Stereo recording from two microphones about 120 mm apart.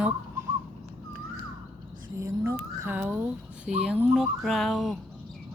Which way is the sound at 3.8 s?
Centre (ahead or behind).